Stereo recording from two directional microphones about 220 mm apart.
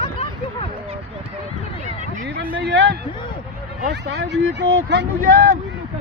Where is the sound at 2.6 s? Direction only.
50° right (ahead or behind).